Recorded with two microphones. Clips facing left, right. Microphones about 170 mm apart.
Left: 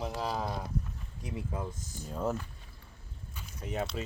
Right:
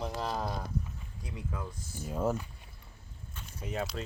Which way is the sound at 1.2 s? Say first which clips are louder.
Left 3 dB; 25° left (ahead or behind).